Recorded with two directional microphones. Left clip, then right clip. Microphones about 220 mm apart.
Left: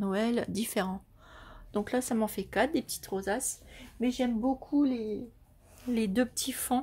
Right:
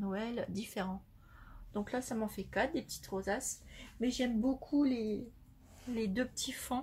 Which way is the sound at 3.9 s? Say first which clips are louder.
Left 4 dB; 20° left (ahead or behind).